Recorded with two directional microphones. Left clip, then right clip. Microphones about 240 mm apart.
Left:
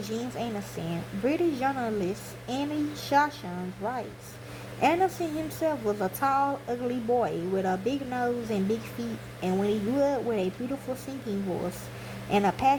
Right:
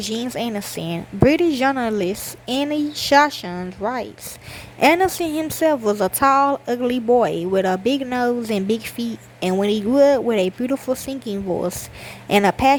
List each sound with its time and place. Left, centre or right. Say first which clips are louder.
0.0 s a woman's voice: right 8 dB; right